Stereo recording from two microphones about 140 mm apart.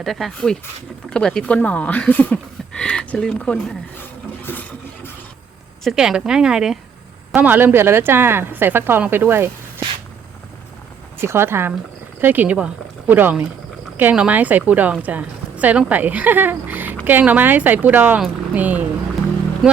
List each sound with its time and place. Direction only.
0.0 s a woman's voice: centre (ahead or behind)
5.8 s a woman's voice: centre (ahead or behind)
11.2 s a woman's voice: 15° right (ahead or behind)